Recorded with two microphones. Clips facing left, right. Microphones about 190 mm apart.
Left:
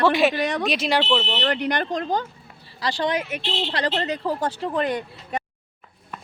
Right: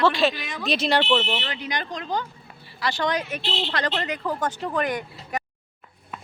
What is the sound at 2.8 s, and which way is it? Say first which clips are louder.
A woman's voice: left 1 dB; 35° left (ahead or behind).